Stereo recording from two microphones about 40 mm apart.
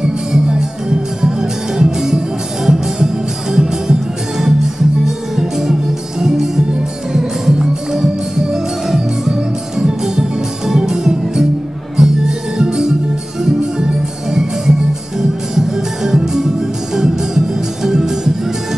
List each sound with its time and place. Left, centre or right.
0.0 s music: centre